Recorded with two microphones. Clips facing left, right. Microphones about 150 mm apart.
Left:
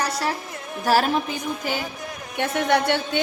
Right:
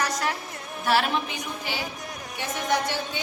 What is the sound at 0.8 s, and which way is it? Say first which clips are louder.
Music: left 4 dB; 40° left (ahead or behind).